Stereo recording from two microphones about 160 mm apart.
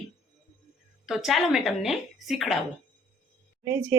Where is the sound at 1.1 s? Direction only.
Centre (ahead or behind).